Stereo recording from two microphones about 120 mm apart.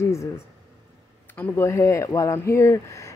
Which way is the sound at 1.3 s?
15° left (ahead or behind).